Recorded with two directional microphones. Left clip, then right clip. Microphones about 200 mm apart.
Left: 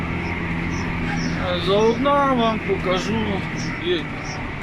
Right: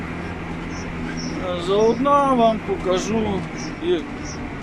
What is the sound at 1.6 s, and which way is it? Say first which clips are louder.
Speech: right 1 dB; 5° right (ahead or behind).